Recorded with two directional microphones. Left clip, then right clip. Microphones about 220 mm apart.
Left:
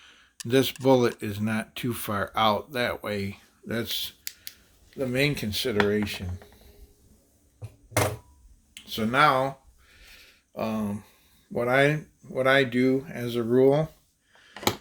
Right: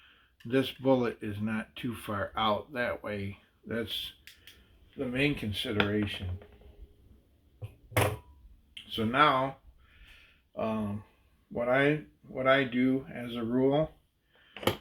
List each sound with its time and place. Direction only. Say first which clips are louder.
0.0 s speech: left 9 dB; 50° left (ahead or behind)
8.7 s speech: left 4 dB; 50° left (ahead or behind)
10.2 s a sound: left 3 dB; 50° left (ahead or behind)
11.5 s speech: left 4 dB; 50° left (ahead or behind)